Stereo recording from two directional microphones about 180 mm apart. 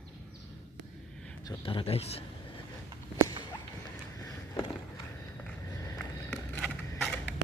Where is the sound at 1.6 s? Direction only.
30° left (ahead or behind).